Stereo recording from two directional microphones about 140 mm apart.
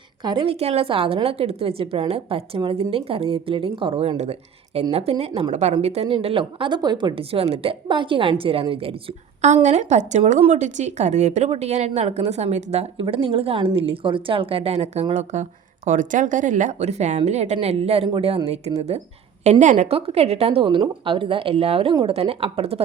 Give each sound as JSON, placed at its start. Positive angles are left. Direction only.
{"t": 0.3, "sound": "a woman's voice", "side_deg": -35}
{"t": 0.6, "sound": "a woman's voice", "side_deg": -45}
{"t": 9.6, "sound": "a woman's voice", "side_deg": -55}
{"t": 19.5, "sound": "a woman's voice", "side_deg": -60}